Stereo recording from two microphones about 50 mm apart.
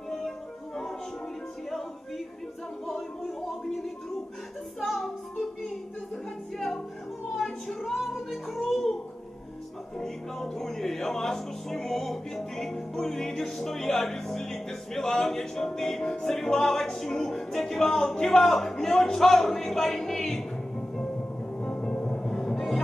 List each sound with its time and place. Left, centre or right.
2.9 s speech: centre
4.7 s music: centre
6.5 s music: centre
9.9 s music: centre